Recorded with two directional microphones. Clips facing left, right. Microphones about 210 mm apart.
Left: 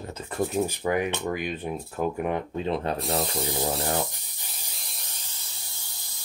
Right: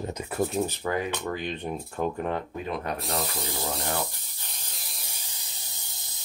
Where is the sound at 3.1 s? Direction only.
30° left (ahead or behind).